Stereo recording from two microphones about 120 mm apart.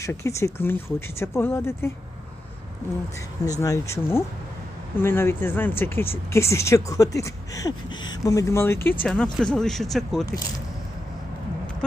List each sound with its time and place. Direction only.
0.0 s speech: 25° left (ahead or behind)
3.6 s speech: 25° left (ahead or behind)
9.0 s speech: 10° left (ahead or behind)